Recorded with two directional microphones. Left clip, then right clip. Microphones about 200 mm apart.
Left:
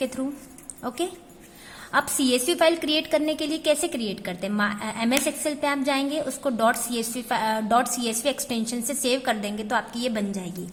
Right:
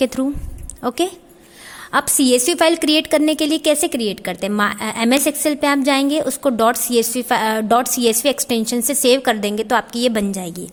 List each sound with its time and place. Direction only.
0.0 s a woman's voice: 40° right (ahead or behind)